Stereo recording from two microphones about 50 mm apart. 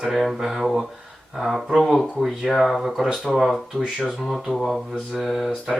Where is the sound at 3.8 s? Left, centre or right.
Centre.